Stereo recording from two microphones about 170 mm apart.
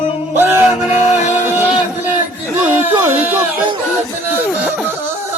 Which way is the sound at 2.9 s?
10° right (ahead or behind).